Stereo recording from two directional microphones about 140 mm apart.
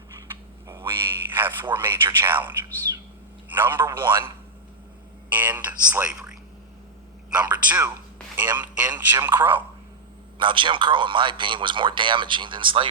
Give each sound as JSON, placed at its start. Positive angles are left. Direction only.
{"t": 0.7, "sound": "frog", "side_deg": -15}
{"t": 1.7, "sound": "speech", "side_deg": -15}
{"t": 3.5, "sound": "speech", "side_deg": -15}
{"t": 4.0, "sound": "a man's voice", "side_deg": -35}
{"t": 5.3, "sound": "speech", "side_deg": -10}
{"t": 10.3, "sound": "a man's voice", "side_deg": -35}